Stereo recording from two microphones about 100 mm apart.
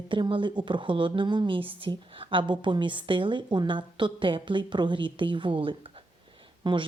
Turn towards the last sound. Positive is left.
turn(degrees=-50)  # may be behind; listen again after turning